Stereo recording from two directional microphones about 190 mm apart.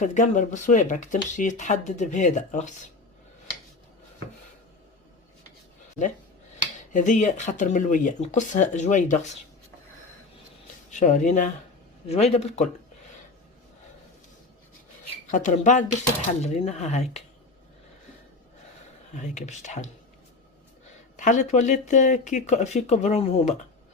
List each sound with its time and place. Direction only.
0.0 s speech: 40° left (ahead or behind)
6.9 s speech: 40° left (ahead or behind)
10.9 s speech: 40° left (ahead or behind)
15.3 s speech: 40° left (ahead or behind)
19.1 s speech: 40° left (ahead or behind)
21.2 s speech: 40° left (ahead or behind)